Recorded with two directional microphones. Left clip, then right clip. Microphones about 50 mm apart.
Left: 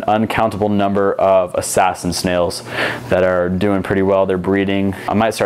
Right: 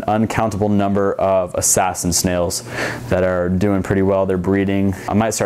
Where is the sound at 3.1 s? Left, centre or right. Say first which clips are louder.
Left 3 dB; centre.